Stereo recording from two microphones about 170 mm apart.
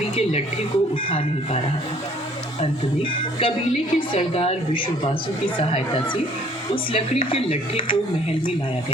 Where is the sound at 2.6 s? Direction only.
30° left (ahead or behind).